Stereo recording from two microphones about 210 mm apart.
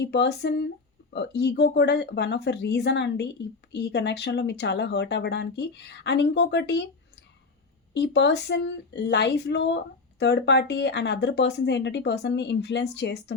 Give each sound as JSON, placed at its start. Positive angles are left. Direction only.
{"t": 0.0, "sound": "speech", "side_deg": 50}
{"t": 7.9, "sound": "speech", "side_deg": 55}